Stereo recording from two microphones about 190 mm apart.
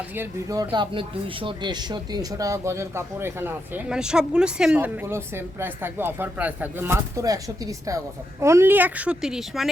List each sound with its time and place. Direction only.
0.2 s speech: 20° right (ahead or behind)